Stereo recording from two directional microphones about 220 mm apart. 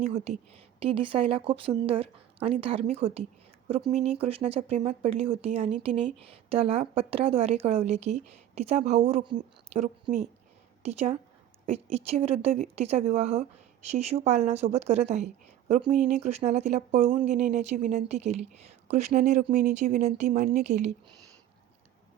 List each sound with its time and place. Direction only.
0.0 s a woman's voice: 30° right (ahead or behind)